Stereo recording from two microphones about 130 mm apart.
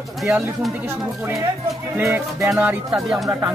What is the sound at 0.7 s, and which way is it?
Speech, 20° right (ahead or behind).